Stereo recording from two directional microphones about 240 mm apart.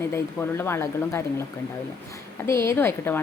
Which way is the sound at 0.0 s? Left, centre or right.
Centre.